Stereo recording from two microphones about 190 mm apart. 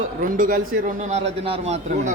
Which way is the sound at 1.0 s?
35° right (ahead or behind).